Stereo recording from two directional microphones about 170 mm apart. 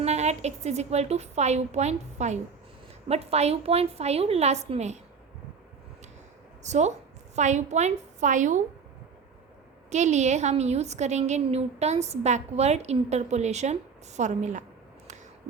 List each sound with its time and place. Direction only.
0.0 s a woman's voice: 40° right (ahead or behind)
6.6 s a woman's voice: 40° right (ahead or behind)
9.9 s a woman's voice: 45° right (ahead or behind)